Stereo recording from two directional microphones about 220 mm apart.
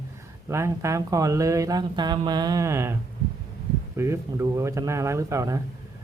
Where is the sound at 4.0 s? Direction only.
10° right (ahead or behind).